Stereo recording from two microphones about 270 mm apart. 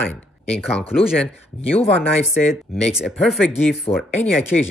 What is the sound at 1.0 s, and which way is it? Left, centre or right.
Speech, centre.